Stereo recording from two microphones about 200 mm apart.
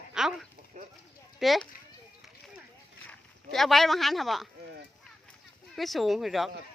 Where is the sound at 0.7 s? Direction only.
35° right (ahead or behind).